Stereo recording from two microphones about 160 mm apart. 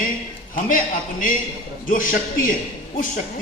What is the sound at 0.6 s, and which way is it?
A man's voice, 55° left (ahead or behind).